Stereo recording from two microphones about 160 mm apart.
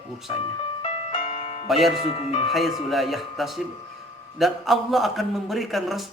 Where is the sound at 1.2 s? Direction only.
40° left (ahead or behind).